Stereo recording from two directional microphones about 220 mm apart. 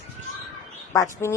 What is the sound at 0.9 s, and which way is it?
Speech, 15° left (ahead or behind).